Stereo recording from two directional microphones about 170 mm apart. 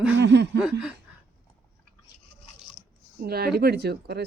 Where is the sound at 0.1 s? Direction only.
90° right.